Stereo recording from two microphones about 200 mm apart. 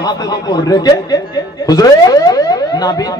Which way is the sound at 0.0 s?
20° left (ahead or behind).